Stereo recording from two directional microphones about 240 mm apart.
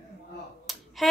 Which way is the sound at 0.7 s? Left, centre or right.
Centre.